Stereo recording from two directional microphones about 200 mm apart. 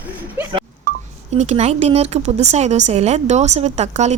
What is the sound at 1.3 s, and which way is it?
A woman's voice, 35° right (ahead or behind).